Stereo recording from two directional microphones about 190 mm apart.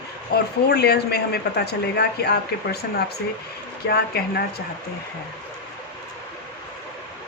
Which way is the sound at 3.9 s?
55° left (ahead or behind).